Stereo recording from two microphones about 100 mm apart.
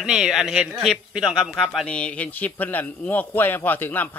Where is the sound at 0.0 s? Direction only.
5° right (ahead or behind).